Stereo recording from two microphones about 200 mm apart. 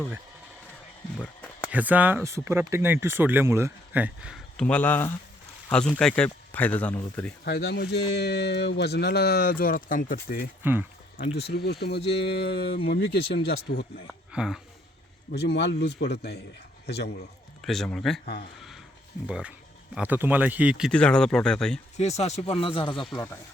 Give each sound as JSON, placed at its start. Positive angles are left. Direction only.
{"t": 1.2, "sound": "a sound", "side_deg": 10}
{"t": 1.7, "sound": "speech", "side_deg": -10}
{"t": 7.4, "sound": "speech", "side_deg": 55}
{"t": 10.6, "sound": "speech", "side_deg": -10}
{"t": 11.3, "sound": "speech", "side_deg": 55}
{"t": 14.1, "sound": "speech", "side_deg": 0}
{"t": 15.3, "sound": "speech", "side_deg": 55}
{"t": 17.7, "sound": "speech", "side_deg": 5}
{"t": 19.3, "sound": "speech", "side_deg": -5}
{"t": 21.9, "sound": "speech", "side_deg": 35}